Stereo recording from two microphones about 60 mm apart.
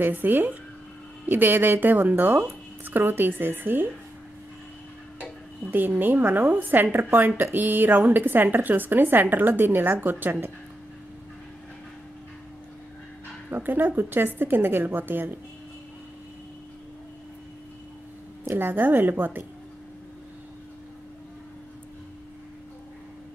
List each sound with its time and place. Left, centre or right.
0.0 s a woman's voice: right
5.2 s a woman's voice: right
13.5 s a woman's voice: right
18.5 s a woman's voice: right